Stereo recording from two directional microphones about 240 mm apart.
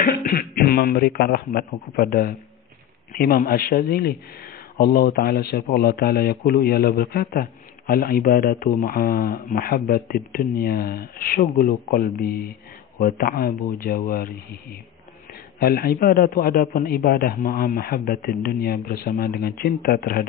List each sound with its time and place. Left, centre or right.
0.0 s speech: left